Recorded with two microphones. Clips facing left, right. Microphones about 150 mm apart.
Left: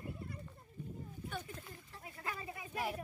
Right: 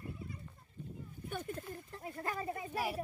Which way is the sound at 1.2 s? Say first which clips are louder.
Right 6 dB; 50° right (ahead or behind).